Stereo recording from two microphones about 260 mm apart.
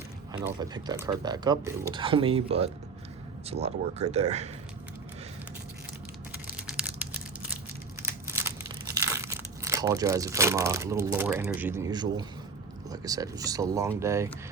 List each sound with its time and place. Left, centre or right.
0.3 s speech: centre
6.6 s a sound: centre
9.0 s speech: centre